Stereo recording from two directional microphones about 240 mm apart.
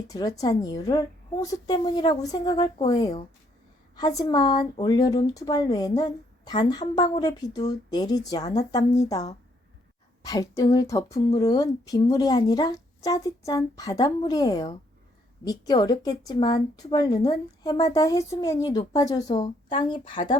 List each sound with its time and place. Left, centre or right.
0.1 s speech: centre
10.2 s speech: centre